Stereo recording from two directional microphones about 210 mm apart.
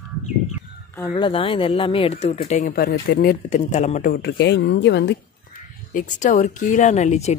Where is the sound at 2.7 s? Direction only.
45° left (ahead or behind).